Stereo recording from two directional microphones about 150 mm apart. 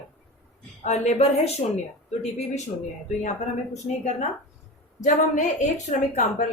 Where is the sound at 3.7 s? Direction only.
50° left (ahead or behind).